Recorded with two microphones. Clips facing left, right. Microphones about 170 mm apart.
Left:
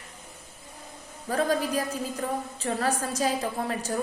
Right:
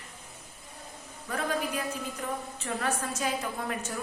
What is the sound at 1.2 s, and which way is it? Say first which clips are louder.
A woman's voice: left 6 dB; 35° left (ahead or behind).